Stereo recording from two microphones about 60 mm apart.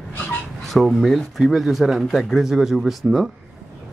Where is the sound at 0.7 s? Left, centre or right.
Centre.